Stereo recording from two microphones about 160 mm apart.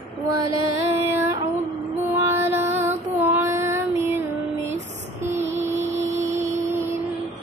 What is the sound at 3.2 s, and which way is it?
Child singing, 15° right (ahead or behind).